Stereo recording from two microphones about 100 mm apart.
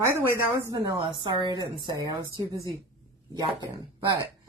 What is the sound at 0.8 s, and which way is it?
A woman's voice, 45° right (ahead or behind).